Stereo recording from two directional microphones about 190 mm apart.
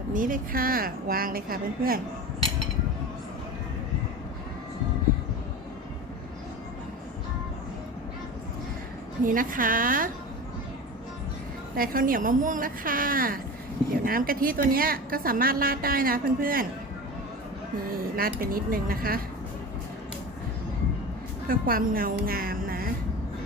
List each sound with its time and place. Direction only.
0.1 s a woman's voice: 45° right (ahead or behind)
9.2 s a woman's voice: 45° right (ahead or behind)
11.8 s a woman's voice: 50° right (ahead or behind)
17.9 s a woman's voice: 50° right (ahead or behind)
21.4 s a woman's voice: 50° right (ahead or behind)
22.3 s music: 50° right (ahead or behind)